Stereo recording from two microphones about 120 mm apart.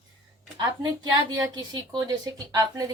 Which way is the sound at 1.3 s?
35° right (ahead or behind).